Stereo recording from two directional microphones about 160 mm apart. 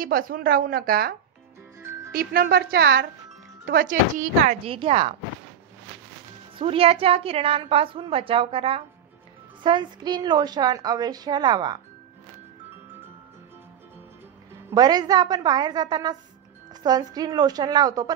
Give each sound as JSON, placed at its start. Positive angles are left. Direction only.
{"t": 0.0, "sound": "a woman's voice", "side_deg": -65}
{"t": 2.1, "sound": "a woman's voice", "side_deg": -70}
{"t": 3.8, "sound": "speech", "side_deg": -55}
{"t": 4.6, "sound": "a woman's voice", "side_deg": -35}
{"t": 6.6, "sound": "a woman's voice", "side_deg": -35}
{"t": 14.7, "sound": "a woman's voice", "side_deg": -25}